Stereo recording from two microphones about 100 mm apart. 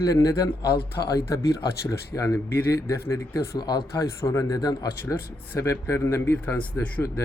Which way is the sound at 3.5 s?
45° left (ahead or behind).